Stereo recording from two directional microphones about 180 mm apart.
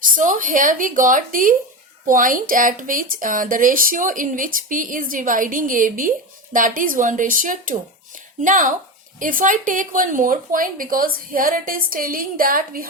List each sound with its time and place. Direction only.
0.2 s speech: 45° right (ahead or behind)